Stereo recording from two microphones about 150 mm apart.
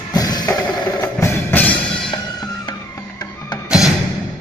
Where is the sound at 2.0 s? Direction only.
30° left (ahead or behind).